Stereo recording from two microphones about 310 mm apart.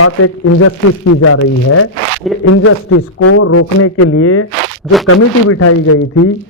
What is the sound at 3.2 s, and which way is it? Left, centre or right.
Speech, left.